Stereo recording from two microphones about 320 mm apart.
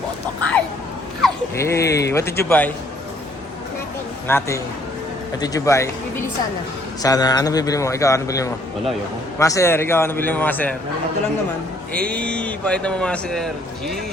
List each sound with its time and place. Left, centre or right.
1.2 s speech: centre
4.3 s a man's voice: centre
7.0 s a man's voice: centre
11.9 s a man's voice: centre